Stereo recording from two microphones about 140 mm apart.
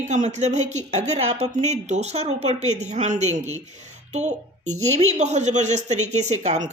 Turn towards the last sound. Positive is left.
turn(degrees=-55)  # may be behind; listen again after turning